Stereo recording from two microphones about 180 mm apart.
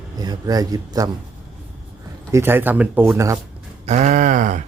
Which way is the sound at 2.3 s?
15° right (ahead or behind).